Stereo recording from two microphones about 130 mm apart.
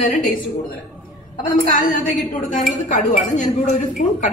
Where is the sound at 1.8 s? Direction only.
85° left.